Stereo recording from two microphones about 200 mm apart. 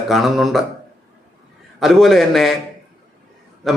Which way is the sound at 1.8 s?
Centre (ahead or behind).